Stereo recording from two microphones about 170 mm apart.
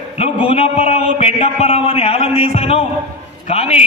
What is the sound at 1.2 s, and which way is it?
A man's voice, 35° left (ahead or behind).